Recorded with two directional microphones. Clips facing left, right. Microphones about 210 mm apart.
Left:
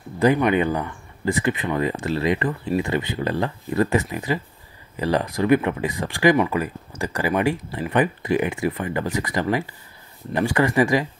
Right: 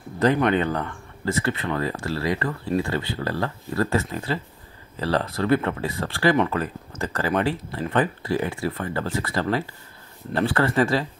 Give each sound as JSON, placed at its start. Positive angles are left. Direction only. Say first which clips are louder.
{"t": 0.2, "sound": "speech", "louder": "left 2 dB", "side_deg": 10}